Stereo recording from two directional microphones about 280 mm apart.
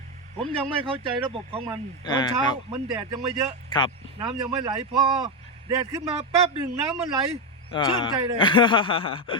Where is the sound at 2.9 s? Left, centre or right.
Right.